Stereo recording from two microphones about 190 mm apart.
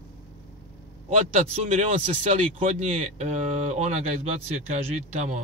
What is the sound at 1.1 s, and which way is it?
Speech, 35° right (ahead or behind).